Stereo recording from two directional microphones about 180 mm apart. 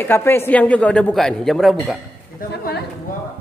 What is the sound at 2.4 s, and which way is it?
Speech, 60° left (ahead or behind).